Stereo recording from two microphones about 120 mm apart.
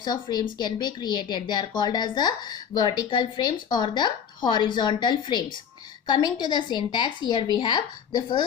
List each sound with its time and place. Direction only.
0.0 s speech: 35° left (ahead or behind)